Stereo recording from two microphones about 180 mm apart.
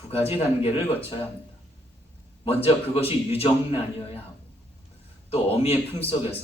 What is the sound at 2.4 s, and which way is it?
A man's voice, 30° left (ahead or behind).